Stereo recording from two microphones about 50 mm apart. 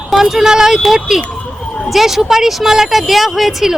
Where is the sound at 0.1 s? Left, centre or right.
Centre.